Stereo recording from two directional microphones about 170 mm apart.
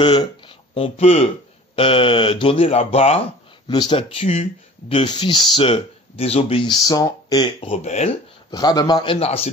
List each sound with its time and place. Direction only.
0.0 s speech: 30° left (ahead or behind)
7.7 s speech: 40° left (ahead or behind)
8.5 s speech: 25° left (ahead or behind)